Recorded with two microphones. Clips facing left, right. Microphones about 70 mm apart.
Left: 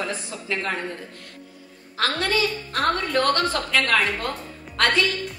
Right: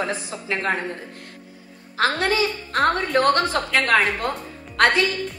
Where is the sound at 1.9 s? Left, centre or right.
Right.